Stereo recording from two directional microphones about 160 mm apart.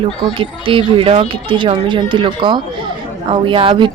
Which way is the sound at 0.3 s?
35° right (ahead or behind).